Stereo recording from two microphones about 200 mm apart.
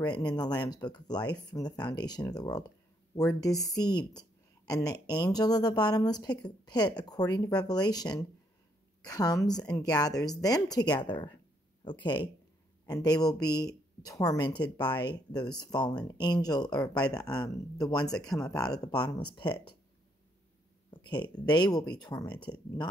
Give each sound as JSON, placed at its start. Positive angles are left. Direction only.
{"t": 0.0, "sound": "a woman's voice", "side_deg": 20}
{"t": 16.8, "sound": "speech", "side_deg": 5}
{"t": 17.1, "sound": "a woman's voice", "side_deg": 20}
{"t": 20.9, "sound": "a woman's voice", "side_deg": 20}